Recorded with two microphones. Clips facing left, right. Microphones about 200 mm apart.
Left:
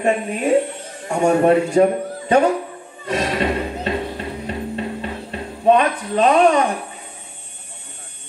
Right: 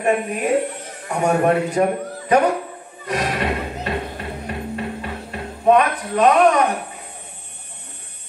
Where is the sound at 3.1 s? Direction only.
25° left (ahead or behind).